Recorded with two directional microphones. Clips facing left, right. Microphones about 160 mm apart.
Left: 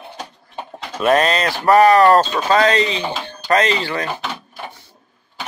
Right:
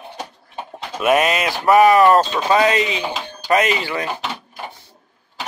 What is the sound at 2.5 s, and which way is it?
Speech, 10° right (ahead or behind).